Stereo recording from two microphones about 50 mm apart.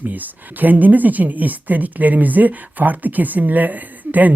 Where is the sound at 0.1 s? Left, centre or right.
Right.